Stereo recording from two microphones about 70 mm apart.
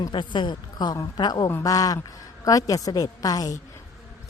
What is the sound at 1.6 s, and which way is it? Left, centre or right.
A woman's voice, left.